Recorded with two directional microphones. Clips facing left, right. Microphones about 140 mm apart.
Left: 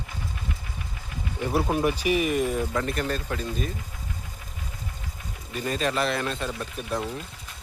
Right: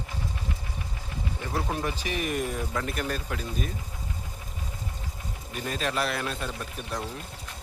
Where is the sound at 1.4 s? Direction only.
15° left (ahead or behind); by 3.7 s 5° right (ahead or behind).